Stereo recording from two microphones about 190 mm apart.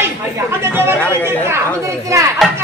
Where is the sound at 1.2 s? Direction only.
15° right (ahead or behind).